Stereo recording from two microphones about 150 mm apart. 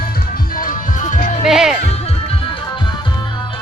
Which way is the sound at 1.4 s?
5° right (ahead or behind).